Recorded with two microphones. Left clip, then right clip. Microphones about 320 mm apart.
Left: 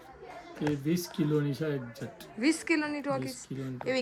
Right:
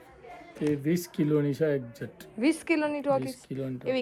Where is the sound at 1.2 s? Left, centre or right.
Right.